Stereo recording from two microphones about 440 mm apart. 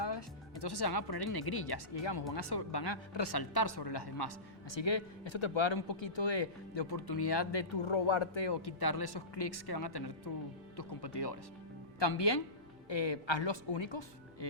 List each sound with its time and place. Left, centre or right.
0.0 s a woman's voice: left
4.7 s speech: left